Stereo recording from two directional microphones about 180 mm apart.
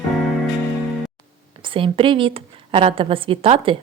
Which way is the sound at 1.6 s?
30° right (ahead or behind).